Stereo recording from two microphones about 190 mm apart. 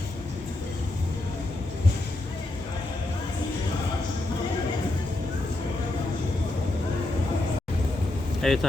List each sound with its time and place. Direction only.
8.4 s speech: centre (ahead or behind)